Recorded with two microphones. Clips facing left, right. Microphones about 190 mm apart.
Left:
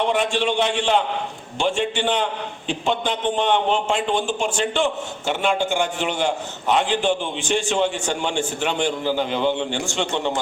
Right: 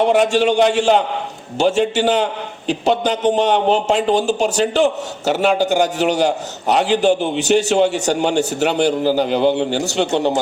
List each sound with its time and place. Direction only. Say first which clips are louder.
0.0 s a man's voice: right 7 dB; 40° right (ahead or behind)